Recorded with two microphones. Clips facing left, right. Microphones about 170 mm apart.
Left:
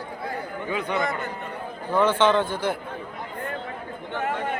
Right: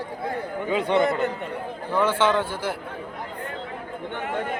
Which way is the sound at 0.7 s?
25° right (ahead or behind).